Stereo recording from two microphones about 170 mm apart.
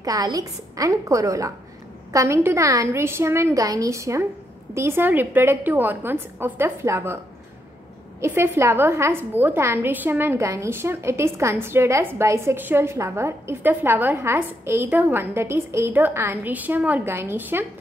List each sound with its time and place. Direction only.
0.0 s a woman's voice: 20° right (ahead or behind)
8.2 s a woman's voice: 15° right (ahead or behind)